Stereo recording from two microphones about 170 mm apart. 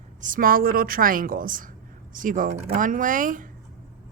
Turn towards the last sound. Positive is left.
turn(degrees=-50)  # may be behind; listen again after turning